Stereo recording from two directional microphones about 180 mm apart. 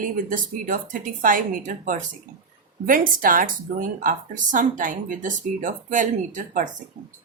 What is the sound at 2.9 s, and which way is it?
Speech, 50° right (ahead or behind).